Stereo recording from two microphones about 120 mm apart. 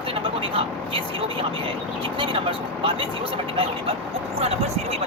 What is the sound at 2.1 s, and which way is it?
Speech, 45° right (ahead or behind).